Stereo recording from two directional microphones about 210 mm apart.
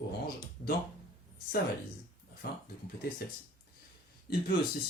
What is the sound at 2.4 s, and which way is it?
Speech, 50° left (ahead or behind).